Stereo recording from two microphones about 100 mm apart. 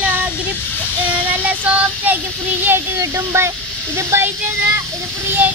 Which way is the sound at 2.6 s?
25° right (ahead or behind).